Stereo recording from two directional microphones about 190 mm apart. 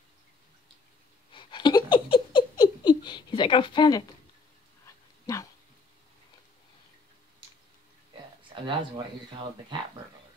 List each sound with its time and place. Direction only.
1.3 s laughter: 25° left (ahead or behind)
5.2 s dog: 20° left (ahead or behind)
8.5 s a sound: 25° right (ahead or behind)
9.7 s speech: 25° right (ahead or behind)